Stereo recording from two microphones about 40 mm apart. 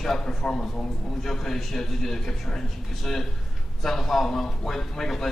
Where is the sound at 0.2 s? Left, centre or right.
Centre.